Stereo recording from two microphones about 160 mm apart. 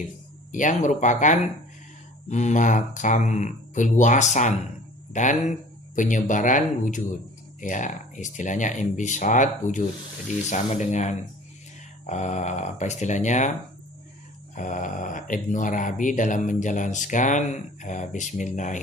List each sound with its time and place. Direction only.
0.5 s speech: 50° left (ahead or behind)
14.5 s speech: 55° left (ahead or behind)